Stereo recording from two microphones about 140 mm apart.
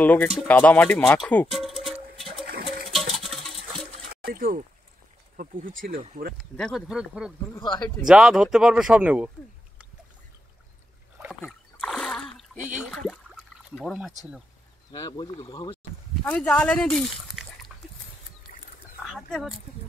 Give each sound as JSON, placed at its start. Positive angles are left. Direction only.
{"t": 0.0, "sound": "speech", "side_deg": 10}
{"t": 1.5, "sound": "music", "side_deg": 0}
{"t": 4.1, "sound": "a sound", "side_deg": -90}
{"t": 5.4, "sound": "speech", "side_deg": -75}
{"t": 6.3, "sound": "speech", "side_deg": 0}
{"t": 7.6, "sound": "speech", "side_deg": 35}
{"t": 8.0, "sound": "speech", "side_deg": -5}
{"t": 11.2, "sound": "splash", "side_deg": 0}
{"t": 12.6, "sound": "speech", "side_deg": -10}
{"t": 12.9, "sound": "a sound", "side_deg": 0}
{"t": 14.9, "sound": "speech", "side_deg": 30}
{"t": 16.3, "sound": "speech", "side_deg": 10}
{"t": 18.5, "sound": "dog", "side_deg": 80}
{"t": 19.0, "sound": "speech", "side_deg": 0}